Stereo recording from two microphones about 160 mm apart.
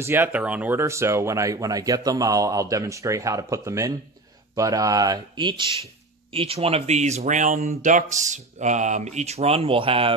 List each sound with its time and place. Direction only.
0.0 s speech: 15° right (ahead or behind); by 10.1 s 35° right (ahead or behind)